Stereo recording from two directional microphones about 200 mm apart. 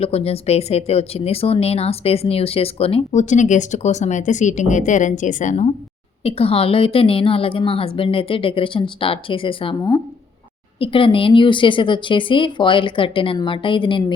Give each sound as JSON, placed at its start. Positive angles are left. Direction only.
{"t": 0.0, "sound": "speech", "side_deg": 30}